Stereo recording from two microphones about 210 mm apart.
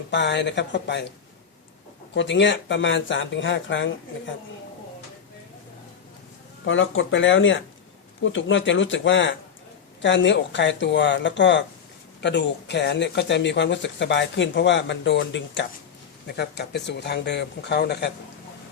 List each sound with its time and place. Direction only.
0.1 s speech: 55° left (ahead or behind)
2.1 s speech: 60° left (ahead or behind)
6.7 s speech: 65° left (ahead or behind)